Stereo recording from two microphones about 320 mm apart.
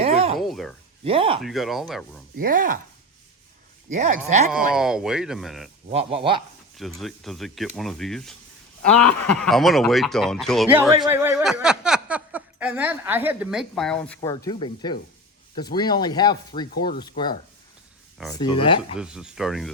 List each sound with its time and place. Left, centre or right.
0.0 s a sound: centre
0.3 s a sound: centre
1.0 s speech: centre
1.4 s speech: centre
2.3 s speech: right
3.8 s speech: right
4.7 s speech: centre
5.9 s speech: centre
6.7 s speech: centre
18.9 s speech: centre